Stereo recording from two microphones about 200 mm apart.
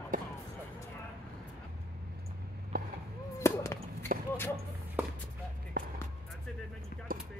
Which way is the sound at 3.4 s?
15° left (ahead or behind).